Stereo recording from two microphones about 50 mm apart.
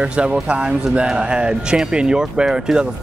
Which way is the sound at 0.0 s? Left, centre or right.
Right.